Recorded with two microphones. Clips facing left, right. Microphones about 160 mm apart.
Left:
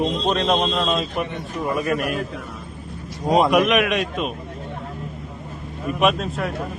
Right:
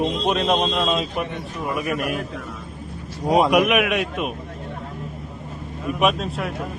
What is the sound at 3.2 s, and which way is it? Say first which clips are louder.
A man's voice: even; 10° right (ahead or behind).